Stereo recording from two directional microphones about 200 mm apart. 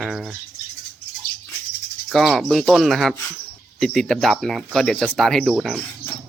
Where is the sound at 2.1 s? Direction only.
Centre (ahead or behind).